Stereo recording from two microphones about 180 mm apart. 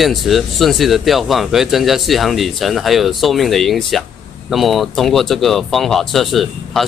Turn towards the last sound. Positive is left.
turn(degrees=0)  # may be behind; listen again after turning